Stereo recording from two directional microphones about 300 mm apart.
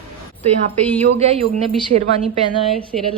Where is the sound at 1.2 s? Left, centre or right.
Right.